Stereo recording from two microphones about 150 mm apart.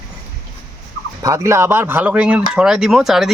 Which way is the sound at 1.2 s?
20° right (ahead or behind).